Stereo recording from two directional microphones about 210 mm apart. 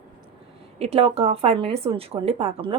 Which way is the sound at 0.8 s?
30° right (ahead or behind).